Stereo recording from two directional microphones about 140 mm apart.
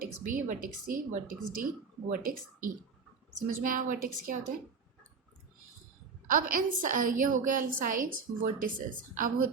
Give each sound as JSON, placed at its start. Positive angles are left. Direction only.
{"t": 0.0, "sound": "a woman's voice", "side_deg": -75}
{"t": 6.6, "sound": "a woman's voice", "side_deg": -75}